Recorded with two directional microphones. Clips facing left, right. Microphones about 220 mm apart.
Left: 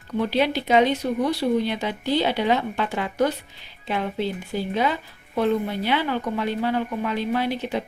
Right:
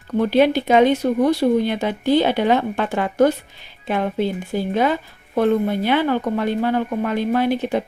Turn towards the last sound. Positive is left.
turn(degrees=-50)  # may be behind; listen again after turning